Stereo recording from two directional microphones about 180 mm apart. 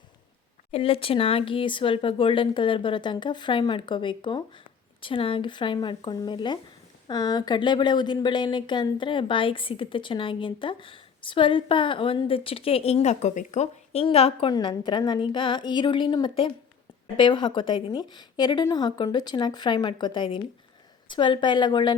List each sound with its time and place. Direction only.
0.7 s speech: 30° left (ahead or behind)